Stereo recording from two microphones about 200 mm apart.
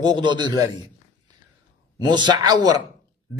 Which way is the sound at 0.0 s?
20° right (ahead or behind).